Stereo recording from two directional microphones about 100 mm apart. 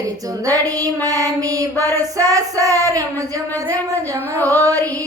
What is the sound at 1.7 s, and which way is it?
Child singing, 25° left (ahead or behind).